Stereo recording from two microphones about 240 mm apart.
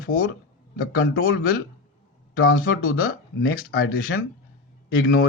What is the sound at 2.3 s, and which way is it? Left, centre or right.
Speech, left.